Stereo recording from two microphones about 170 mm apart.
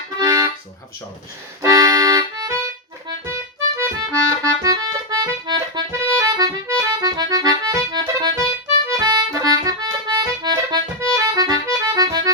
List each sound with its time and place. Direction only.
0.2 s accordion: 20° right (ahead or behind)
1.6 s accordion: 20° right (ahead or behind)